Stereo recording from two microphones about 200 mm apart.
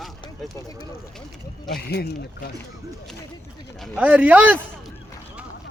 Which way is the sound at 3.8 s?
5° right (ahead or behind).